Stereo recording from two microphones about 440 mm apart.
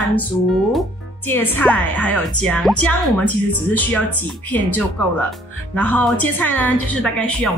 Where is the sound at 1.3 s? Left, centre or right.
Centre.